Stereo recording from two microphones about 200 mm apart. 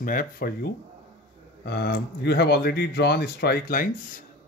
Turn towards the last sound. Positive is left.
turn(degrees=45)  # may be behind; listen again after turning